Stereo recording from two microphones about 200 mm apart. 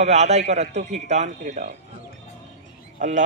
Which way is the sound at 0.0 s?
35° right (ahead or behind).